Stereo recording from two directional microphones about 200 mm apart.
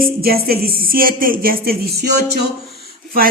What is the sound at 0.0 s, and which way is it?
Speech, 50° right (ahead or behind).